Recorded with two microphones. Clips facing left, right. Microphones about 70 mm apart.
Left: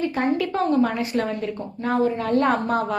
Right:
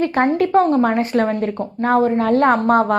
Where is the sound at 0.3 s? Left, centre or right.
Right.